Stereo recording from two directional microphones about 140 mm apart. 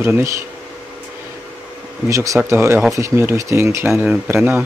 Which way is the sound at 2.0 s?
20° right (ahead or behind).